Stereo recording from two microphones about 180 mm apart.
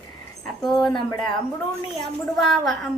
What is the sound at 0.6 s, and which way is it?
Speech, centre (ahead or behind).